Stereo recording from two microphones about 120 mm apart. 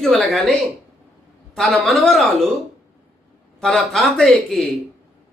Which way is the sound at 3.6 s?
5° left (ahead or behind).